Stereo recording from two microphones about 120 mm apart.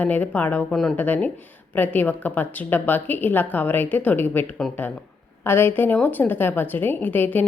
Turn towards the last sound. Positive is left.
turn(degrees=15)  # may be behind; listen again after turning